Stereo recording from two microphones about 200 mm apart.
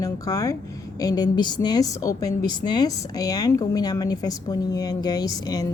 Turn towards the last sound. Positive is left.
turn(degrees=20)  # may be behind; listen again after turning